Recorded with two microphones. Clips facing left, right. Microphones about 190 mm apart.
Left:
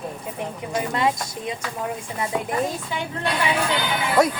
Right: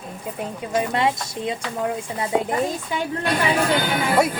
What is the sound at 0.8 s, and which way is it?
Speech, 25° right (ahead or behind).